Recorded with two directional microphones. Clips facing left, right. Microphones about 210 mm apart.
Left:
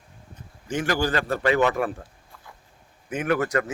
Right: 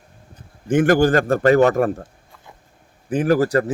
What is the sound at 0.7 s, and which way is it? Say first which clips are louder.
A man's voice: right 10 dB; 50° right (ahead or behind).